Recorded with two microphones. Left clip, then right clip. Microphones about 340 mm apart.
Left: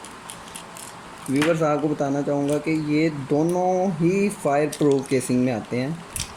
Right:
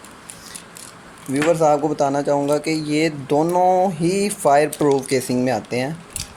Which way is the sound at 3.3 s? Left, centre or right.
Right.